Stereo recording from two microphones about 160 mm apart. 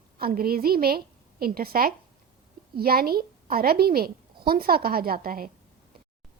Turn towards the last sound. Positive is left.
turn(degrees=-65)  # may be behind; listen again after turning